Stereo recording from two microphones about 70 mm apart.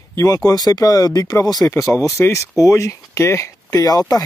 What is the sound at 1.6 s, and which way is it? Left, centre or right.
Speech, left.